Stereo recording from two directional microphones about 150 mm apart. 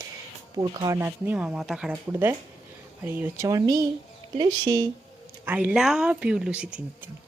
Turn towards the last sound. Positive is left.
turn(degrees=-10)  # may be behind; listen again after turning